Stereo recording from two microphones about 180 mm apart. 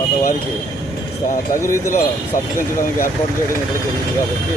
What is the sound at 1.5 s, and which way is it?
Speech, 15° left (ahead or behind).